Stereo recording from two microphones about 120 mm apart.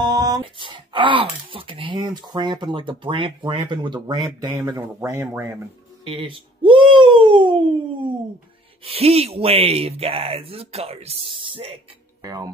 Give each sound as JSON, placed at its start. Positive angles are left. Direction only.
{"t": 0.0, "sound": "speech", "side_deg": -35}
{"t": 6.0, "sound": "speech", "side_deg": -45}
{"t": 8.8, "sound": "speech", "side_deg": -55}
{"t": 12.2, "sound": "speech", "side_deg": -30}